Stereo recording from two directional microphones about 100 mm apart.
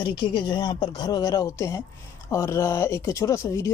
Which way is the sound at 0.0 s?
55° left (ahead or behind).